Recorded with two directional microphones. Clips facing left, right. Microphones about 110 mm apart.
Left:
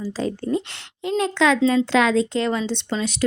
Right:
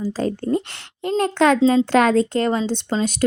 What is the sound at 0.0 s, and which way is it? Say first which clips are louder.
Speech: right 3 dB; 45° right (ahead or behind).